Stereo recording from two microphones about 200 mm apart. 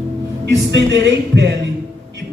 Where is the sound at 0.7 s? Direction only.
60° right (ahead or behind).